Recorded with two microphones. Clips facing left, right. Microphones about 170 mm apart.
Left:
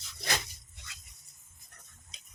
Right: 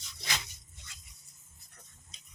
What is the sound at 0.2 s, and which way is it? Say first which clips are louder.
Dog: left 4 dB; 50° left (ahead or behind).